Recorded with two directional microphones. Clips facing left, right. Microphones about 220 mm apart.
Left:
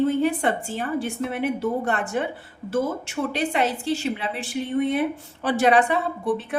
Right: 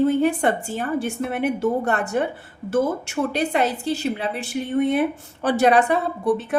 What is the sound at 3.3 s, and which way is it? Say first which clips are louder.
A woman's voice: right 1 dB; 40° right (ahead or behind).